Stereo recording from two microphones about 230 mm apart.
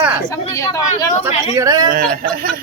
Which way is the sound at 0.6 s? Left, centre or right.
Centre.